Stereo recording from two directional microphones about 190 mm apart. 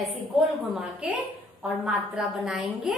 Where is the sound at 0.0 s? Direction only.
Centre (ahead or behind).